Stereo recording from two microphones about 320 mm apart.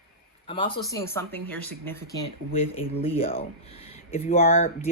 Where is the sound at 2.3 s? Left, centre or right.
Centre.